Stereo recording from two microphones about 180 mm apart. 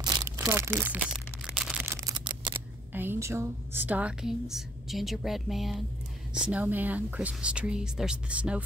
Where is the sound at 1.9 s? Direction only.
20° right (ahead or behind).